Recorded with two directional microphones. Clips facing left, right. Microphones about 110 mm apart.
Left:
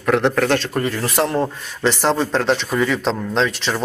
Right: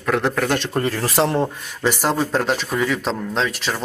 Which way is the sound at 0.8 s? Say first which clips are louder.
Even; 35° right (ahead or behind).